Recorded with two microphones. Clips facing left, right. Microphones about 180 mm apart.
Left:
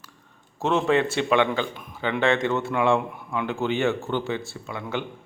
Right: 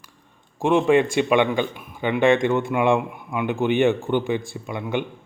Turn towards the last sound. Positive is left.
turn(degrees=-15)  # may be behind; listen again after turning